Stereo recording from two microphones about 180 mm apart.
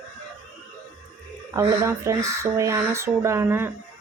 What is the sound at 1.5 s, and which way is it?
Speech, 15° right (ahead or behind).